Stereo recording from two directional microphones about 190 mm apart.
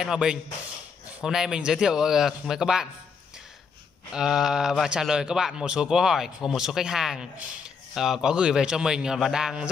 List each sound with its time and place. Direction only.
0.0 s speech: 5° right (ahead or behind)
4.1 s speech: 5° right (ahead or behind)